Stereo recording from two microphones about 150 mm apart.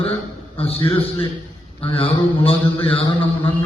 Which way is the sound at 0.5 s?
40° left (ahead or behind).